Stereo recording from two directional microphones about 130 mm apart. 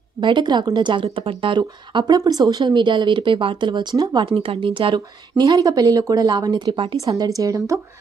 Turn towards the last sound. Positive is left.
turn(degrees=-25)  # may be behind; listen again after turning